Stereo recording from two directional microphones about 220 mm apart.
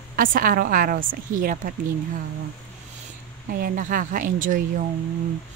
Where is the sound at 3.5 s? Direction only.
40° right (ahead or behind).